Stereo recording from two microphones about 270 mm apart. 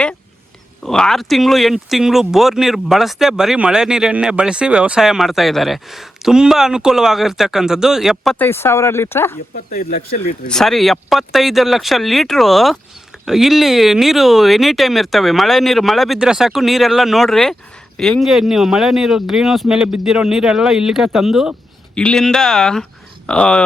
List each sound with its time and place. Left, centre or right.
0.9 s speech: centre
9.7 s speech: left
10.5 s speech: centre